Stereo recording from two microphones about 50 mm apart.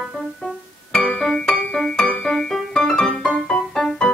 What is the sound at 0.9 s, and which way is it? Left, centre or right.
Music, centre.